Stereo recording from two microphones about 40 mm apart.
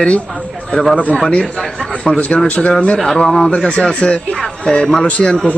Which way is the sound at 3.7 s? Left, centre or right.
Left.